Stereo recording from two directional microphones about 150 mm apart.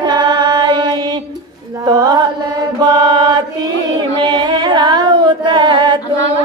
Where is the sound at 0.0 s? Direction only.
30° right (ahead or behind).